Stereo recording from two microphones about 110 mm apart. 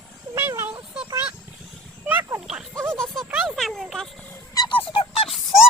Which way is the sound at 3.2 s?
10° right (ahead or behind).